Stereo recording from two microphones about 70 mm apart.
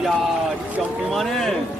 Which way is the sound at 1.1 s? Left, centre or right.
Centre.